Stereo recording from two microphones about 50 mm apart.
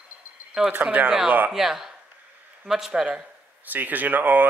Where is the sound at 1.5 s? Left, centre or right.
Centre.